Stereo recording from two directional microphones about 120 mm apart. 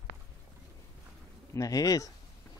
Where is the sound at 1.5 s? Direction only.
30° left (ahead or behind).